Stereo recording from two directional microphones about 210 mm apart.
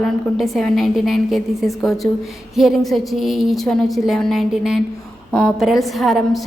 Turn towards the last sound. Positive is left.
turn(degrees=0)  # may be behind; listen again after turning